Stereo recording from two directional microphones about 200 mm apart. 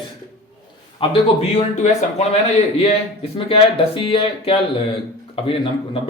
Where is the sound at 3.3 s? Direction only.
30° left (ahead or behind).